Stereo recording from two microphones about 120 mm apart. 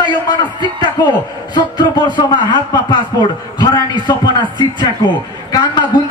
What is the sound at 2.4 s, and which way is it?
Speech, 40° left (ahead or behind).